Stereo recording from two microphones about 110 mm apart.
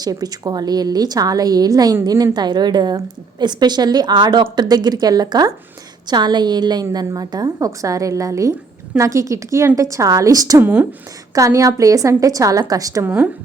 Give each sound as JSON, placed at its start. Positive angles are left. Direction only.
{"t": 0.0, "sound": "a woman's voice", "side_deg": -35}
{"t": 10.6, "sound": "speech", "side_deg": -15}
{"t": 11.3, "sound": "a woman's voice", "side_deg": -30}